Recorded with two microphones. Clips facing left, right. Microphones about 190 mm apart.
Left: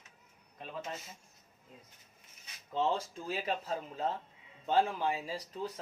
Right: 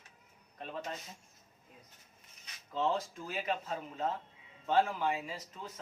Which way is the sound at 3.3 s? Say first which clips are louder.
Left 3 dB; 35° left (ahead or behind).